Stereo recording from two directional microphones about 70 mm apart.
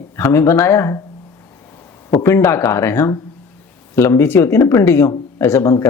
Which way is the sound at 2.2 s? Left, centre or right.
Left.